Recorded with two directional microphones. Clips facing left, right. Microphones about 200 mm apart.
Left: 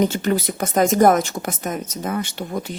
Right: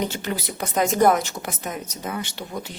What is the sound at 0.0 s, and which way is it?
Speech, 50° left (ahead or behind).